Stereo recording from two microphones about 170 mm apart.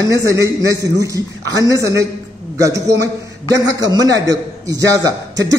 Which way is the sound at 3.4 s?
20° right (ahead or behind).